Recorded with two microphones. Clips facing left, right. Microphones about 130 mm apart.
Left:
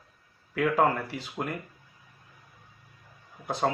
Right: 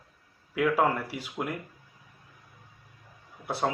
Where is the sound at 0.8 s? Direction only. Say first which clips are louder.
Left 1 dB; 10° right (ahead or behind).